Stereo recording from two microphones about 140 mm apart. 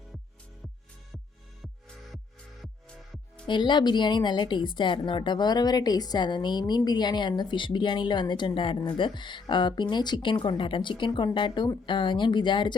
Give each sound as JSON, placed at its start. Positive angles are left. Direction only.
{"t": 3.4, "sound": "a woman's voice", "side_deg": 35}